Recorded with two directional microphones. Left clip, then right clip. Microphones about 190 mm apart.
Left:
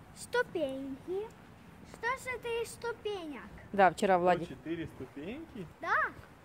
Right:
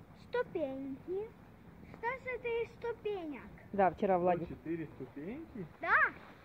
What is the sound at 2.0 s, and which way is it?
Speech, 35° left (ahead or behind).